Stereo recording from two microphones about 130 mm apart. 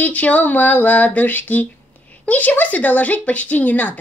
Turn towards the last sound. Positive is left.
turn(degrees=15)  # may be behind; listen again after turning